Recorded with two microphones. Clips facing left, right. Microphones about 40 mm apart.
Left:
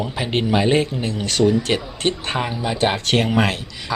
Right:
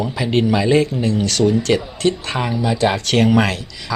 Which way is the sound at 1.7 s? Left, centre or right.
Left.